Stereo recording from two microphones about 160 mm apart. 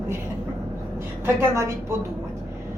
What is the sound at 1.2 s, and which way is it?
Speech, 15° right (ahead or behind).